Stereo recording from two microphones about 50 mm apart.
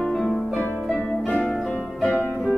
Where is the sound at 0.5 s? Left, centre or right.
Left.